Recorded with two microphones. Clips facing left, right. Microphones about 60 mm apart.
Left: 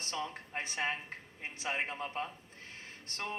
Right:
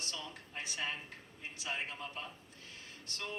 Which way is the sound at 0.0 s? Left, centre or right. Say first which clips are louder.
Left 6 dB; left.